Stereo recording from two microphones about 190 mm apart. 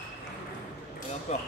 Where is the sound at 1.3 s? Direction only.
35° left (ahead or behind).